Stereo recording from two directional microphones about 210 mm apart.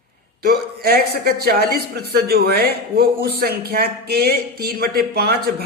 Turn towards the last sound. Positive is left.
turn(degrees=-50)  # may be behind; listen again after turning